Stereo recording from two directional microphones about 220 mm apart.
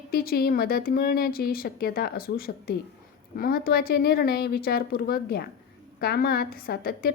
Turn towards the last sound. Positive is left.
turn(degrees=45)  # may be behind; listen again after turning